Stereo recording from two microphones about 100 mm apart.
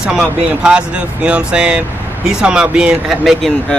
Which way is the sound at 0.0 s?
5° right (ahead or behind).